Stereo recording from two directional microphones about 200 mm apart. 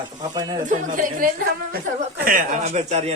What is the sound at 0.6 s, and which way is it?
Speech, 40° right (ahead or behind).